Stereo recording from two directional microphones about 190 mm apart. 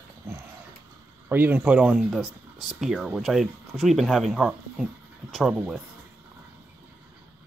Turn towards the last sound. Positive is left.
turn(degrees=-5)  # may be behind; listen again after turning